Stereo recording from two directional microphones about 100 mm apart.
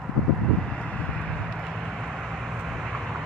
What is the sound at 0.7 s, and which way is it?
Vehicle, 10° left (ahead or behind).